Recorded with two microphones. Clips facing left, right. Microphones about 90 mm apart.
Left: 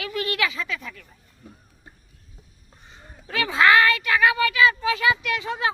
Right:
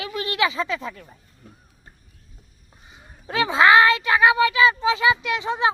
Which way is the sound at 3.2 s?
25° right (ahead or behind).